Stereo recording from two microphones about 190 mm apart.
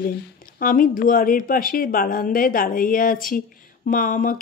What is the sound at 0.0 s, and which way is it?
Speech, 50° left (ahead or behind).